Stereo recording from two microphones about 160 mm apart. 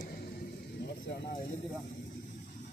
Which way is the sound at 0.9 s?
90° left.